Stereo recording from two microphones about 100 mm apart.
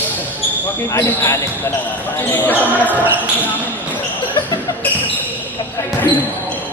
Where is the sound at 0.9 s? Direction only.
30° left (ahead or behind).